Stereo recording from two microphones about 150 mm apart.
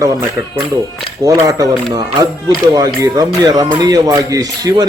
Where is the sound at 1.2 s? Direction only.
25° right (ahead or behind).